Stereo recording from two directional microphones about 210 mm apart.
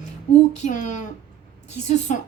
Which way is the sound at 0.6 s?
35° left (ahead or behind).